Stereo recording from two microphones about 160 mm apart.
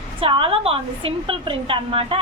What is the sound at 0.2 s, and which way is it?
A woman's voice, 35° right (ahead or behind).